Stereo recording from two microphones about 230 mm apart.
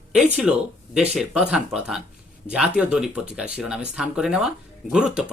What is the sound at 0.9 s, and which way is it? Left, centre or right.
Speech, centre.